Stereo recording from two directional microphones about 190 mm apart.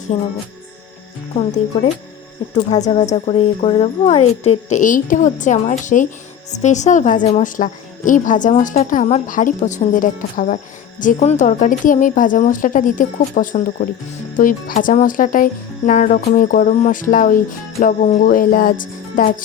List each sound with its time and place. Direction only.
0.1 s speech: 30° left (ahead or behind)
2.8 s a woman's voice: 35° left (ahead or behind)